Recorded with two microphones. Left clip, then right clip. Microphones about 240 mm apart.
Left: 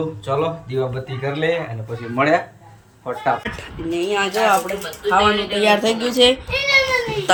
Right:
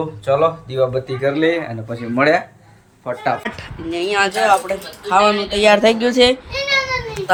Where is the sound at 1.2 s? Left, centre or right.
Centre.